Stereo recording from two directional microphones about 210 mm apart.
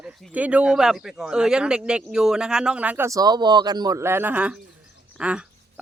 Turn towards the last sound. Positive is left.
turn(degrees=-5)  # may be behind; listen again after turning